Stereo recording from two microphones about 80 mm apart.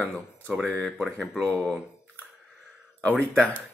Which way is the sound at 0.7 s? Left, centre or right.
Centre.